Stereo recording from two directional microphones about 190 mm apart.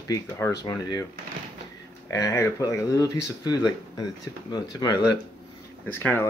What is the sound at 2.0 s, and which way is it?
Speech, 15° left (ahead or behind).